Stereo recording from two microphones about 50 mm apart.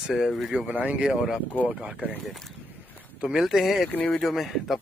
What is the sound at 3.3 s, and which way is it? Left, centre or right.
Speech, centre.